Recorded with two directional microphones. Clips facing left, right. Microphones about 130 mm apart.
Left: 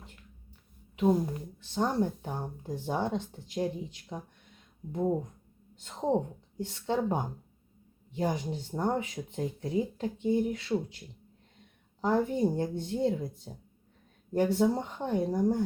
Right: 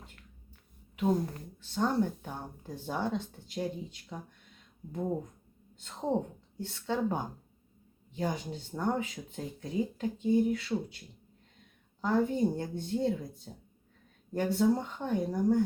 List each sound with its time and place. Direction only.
0.9 s a woman's voice: 15° left (ahead or behind)
5.8 s a woman's voice: 20° left (ahead or behind)
11.9 s a woman's voice: 20° left (ahead or behind)